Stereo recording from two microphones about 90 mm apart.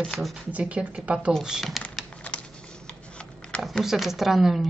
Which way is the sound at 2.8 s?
10° left (ahead or behind).